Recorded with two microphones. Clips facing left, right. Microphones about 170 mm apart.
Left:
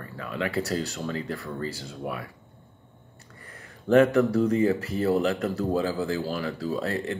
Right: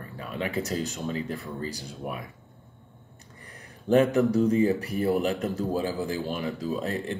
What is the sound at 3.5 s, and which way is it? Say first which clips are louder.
Speech: left 2 dB; 20° right (ahead or behind).